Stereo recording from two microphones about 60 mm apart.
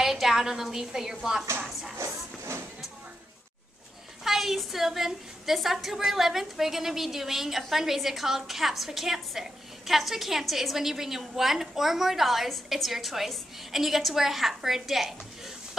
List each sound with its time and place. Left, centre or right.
0.0 s a woman's voice: centre
2.0 s a sound: right
4.2 s a woman's voice: centre